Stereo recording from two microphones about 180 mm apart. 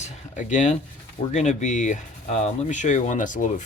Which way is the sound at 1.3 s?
40° left (ahead or behind).